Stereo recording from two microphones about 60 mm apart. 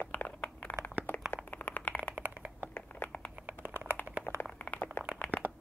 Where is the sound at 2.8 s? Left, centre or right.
Left.